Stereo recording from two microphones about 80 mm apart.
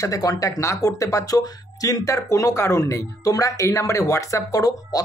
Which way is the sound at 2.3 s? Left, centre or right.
Left.